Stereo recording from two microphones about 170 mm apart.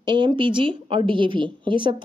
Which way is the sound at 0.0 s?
25° right (ahead or behind).